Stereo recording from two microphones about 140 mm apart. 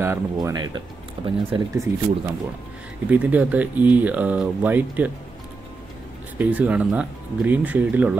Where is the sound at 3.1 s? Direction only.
10° right (ahead or behind).